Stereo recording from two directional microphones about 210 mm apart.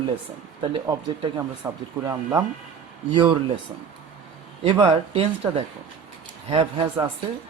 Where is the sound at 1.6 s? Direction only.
15° right (ahead or behind).